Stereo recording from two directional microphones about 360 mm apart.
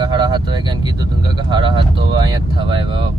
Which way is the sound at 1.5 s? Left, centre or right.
Centre.